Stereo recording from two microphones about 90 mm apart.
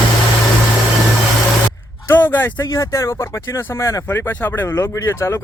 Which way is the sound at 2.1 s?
25° left (ahead or behind).